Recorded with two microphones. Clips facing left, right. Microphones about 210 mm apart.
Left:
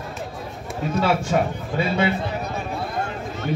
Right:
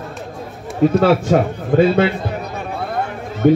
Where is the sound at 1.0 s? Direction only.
55° right (ahead or behind).